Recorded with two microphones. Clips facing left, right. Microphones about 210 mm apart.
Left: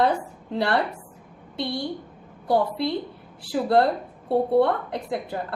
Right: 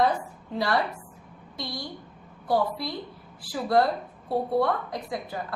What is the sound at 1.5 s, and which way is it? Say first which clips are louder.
Speech: left 7 dB; 60° left (ahead or behind).